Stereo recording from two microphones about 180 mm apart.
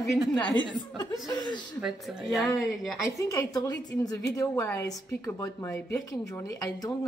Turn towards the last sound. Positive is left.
turn(degrees=15)  # may be behind; listen again after turning